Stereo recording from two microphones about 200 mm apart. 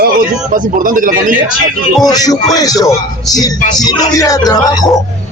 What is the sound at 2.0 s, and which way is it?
A man's voice, 20° left (ahead or behind).